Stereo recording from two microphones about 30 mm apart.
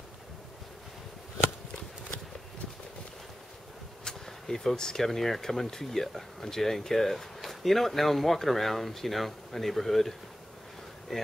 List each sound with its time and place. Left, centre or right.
4.3 s a sound: centre
4.7 s speech: left
5.0 s speech: centre